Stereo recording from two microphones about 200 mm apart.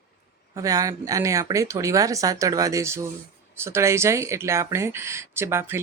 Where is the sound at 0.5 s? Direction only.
15° right (ahead or behind).